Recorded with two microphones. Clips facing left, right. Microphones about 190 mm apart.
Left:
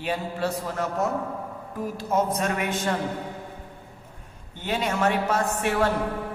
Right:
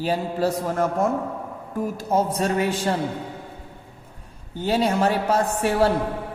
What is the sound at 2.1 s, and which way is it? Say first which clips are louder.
Speech: right 3 dB; 30° right (ahead or behind).